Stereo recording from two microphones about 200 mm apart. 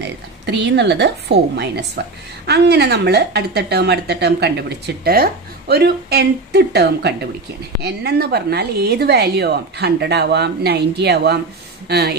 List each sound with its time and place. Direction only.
0.0 s a woman's voice: 60° right (ahead or behind)